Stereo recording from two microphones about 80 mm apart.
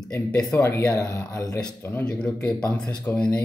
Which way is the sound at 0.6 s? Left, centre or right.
Left.